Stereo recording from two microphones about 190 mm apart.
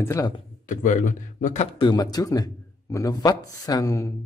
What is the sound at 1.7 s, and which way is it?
Speech, 20° left (ahead or behind).